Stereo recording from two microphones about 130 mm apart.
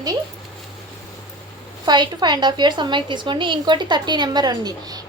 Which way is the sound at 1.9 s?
35° right (ahead or behind).